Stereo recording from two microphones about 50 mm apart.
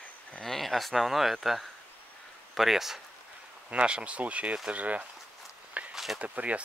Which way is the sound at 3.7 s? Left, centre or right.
Right.